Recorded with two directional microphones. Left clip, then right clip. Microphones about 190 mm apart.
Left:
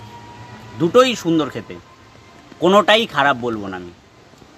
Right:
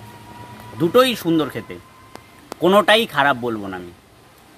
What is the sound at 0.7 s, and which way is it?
A man's voice, 5° right (ahead or behind).